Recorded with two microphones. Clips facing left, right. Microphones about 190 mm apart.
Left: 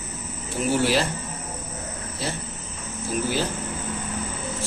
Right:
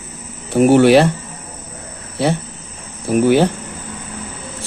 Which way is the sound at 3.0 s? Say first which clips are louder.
Right 13 dB; 65° right (ahead or behind).